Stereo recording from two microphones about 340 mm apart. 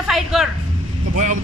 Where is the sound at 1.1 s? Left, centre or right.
Right.